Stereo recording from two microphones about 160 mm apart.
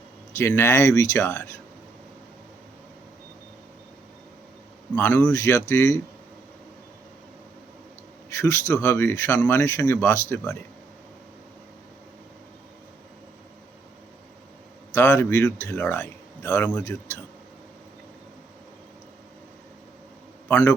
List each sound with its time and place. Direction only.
0.3 s speech: 15° left (ahead or behind)
4.9 s speech: 10° left (ahead or behind)
8.3 s speech: 15° left (ahead or behind)
14.9 s speech: 15° left (ahead or behind)
20.5 s speech: 10° left (ahead or behind)